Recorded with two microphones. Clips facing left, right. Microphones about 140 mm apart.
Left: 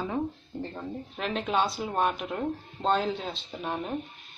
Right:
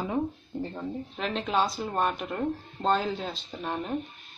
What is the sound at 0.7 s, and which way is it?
Speech, centre (ahead or behind).